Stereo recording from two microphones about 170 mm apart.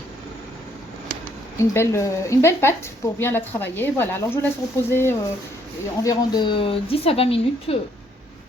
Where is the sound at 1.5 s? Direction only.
15° left (ahead or behind).